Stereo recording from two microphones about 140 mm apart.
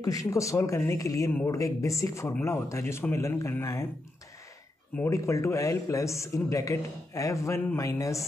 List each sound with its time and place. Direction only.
0.0 s a man's voice: 25° left (ahead or behind)
4.9 s a man's voice: 20° left (ahead or behind)